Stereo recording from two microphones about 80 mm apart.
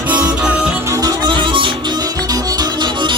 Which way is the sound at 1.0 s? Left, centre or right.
Right.